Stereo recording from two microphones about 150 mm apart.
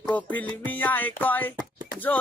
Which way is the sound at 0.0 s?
10° left (ahead or behind).